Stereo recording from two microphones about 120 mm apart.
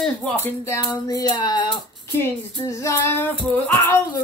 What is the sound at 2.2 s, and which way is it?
Child singing, 25° left (ahead or behind).